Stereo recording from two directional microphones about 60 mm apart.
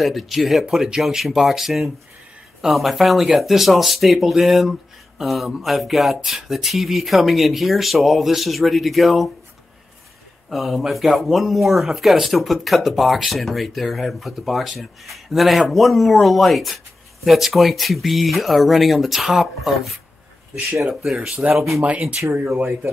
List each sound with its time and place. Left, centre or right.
0.0 s speech: centre
10.5 s speech: centre
21.4 s speech: right